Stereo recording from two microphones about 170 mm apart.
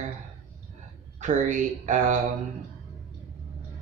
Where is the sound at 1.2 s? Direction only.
45° right (ahead or behind).